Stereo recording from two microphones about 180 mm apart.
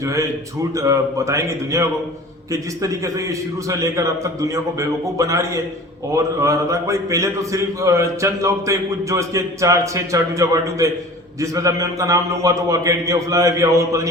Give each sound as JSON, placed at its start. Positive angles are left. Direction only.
{"t": 0.0, "sound": "a man's voice", "side_deg": -15}